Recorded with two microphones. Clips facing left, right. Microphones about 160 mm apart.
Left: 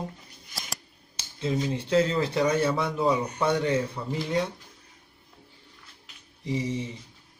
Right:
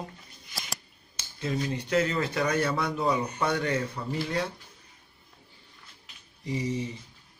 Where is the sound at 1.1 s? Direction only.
25° left (ahead or behind).